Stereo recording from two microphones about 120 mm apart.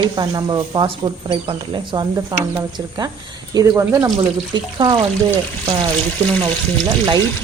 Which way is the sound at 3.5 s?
35° right (ahead or behind).